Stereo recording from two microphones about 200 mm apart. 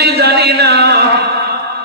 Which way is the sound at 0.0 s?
55° right (ahead or behind).